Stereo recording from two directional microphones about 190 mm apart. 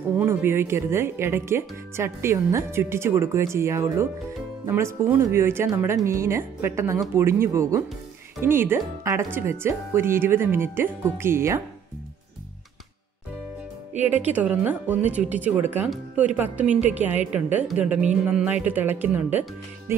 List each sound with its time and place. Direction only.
0.2 s speech: 10° right (ahead or behind)
14.3 s speech: 10° right (ahead or behind)
16.6 s a woman's voice: 35° right (ahead or behind)
16.9 s speech: 10° right (ahead or behind)